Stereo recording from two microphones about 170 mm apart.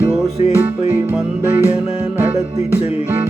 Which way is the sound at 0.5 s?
10° right (ahead or behind).